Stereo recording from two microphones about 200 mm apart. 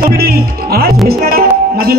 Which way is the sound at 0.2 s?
50° right (ahead or behind).